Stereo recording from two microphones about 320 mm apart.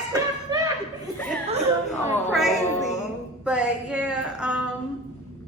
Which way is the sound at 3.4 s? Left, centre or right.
Centre.